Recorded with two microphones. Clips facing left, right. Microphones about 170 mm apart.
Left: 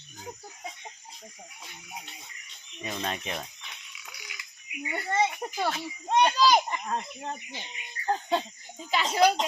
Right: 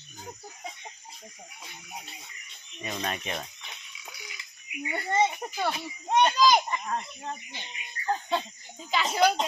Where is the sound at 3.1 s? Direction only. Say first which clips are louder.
Right 1 dB; 20° right (ahead or behind).